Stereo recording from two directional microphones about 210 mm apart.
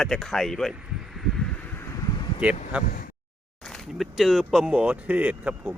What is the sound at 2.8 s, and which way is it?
Speech, 45° left (ahead or behind).